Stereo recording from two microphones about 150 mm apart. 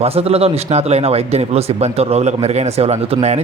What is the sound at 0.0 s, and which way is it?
Speech, 45° right (ahead or behind).